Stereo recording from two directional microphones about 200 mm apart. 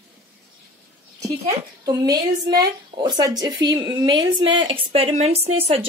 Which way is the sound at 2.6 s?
20° right (ahead or behind).